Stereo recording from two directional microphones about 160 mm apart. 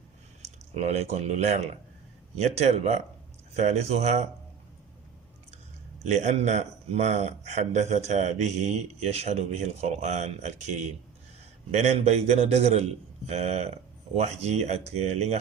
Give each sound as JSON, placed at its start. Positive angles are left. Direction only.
{"t": 0.4, "sound": "speech", "side_deg": -45}
{"t": 6.0, "sound": "speech", "side_deg": -45}